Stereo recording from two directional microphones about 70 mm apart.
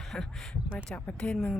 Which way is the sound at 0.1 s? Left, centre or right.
Centre.